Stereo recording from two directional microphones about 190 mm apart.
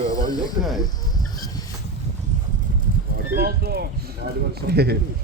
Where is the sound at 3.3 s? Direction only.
55° right (ahead or behind).